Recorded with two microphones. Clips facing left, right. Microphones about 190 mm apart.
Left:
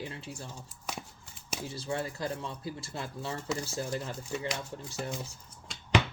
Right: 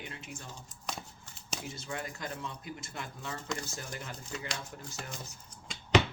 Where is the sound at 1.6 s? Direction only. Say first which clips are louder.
Left 7 dB; 30° left (ahead or behind).